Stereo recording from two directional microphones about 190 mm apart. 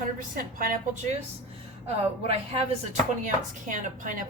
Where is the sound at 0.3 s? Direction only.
50° right (ahead or behind).